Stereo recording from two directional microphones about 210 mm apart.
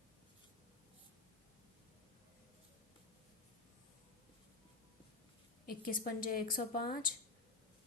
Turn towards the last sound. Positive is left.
turn(degrees=40)  # may be behind; listen again after turning